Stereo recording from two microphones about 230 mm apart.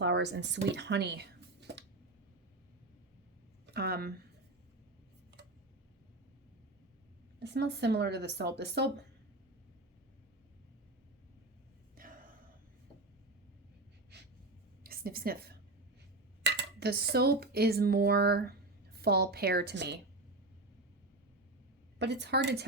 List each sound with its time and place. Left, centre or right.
0.0 s speech: right
3.8 s speech: right
7.3 s speech: right
14.8 s a woman's voice: right
16.4 s dishes: right
18.9 s speech: right
21.9 s speech: right